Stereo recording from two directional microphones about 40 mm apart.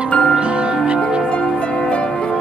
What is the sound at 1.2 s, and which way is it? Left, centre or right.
Music, left.